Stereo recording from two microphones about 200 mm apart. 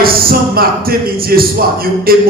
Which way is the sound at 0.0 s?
45° right (ahead or behind).